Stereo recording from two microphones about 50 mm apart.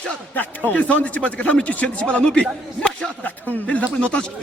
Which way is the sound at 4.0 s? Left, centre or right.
Left.